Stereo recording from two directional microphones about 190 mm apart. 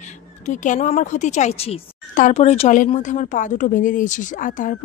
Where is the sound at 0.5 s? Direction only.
40° left (ahead or behind).